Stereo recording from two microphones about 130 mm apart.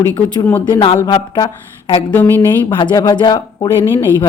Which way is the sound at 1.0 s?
35° left (ahead or behind).